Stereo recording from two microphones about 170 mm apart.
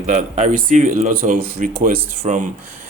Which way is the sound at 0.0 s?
45° right (ahead or behind).